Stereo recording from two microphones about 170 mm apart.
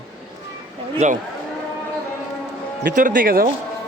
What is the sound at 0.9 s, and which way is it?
Speech, 45° right (ahead or behind).